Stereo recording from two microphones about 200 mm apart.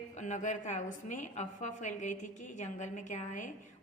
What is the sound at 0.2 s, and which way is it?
A woman's voice, 35° left (ahead or behind).